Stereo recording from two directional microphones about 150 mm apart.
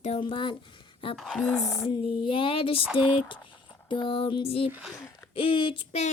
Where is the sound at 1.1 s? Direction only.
Centre (ahead or behind).